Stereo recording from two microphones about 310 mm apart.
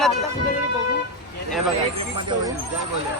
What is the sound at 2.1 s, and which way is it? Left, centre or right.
Speech, centre.